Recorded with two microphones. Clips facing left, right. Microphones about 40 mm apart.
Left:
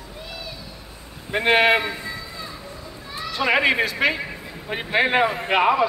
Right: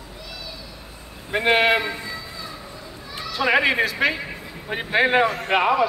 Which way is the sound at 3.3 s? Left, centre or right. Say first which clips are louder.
Even; centre.